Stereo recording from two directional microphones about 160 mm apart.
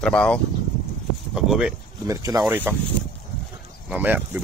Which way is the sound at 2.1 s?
20° right (ahead or behind).